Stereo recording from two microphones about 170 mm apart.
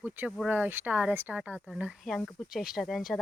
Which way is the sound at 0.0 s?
10° right (ahead or behind).